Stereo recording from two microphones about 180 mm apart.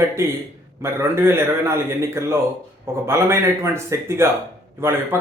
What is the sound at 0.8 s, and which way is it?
Speech, 15° right (ahead or behind).